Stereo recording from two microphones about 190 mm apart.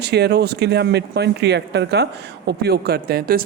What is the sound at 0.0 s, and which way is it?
A woman's voice, 60° right (ahead or behind).